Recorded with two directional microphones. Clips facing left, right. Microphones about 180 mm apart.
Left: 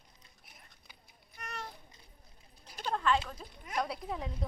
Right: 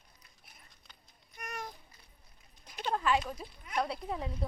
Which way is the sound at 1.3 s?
10° right (ahead or behind).